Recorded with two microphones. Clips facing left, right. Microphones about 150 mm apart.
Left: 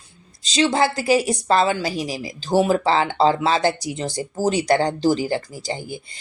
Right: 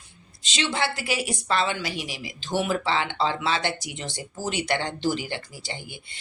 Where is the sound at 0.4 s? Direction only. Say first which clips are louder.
Left 8 dB; 35° left (ahead or behind).